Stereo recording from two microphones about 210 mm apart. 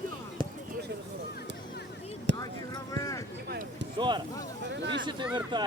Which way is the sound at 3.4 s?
50° right (ahead or behind).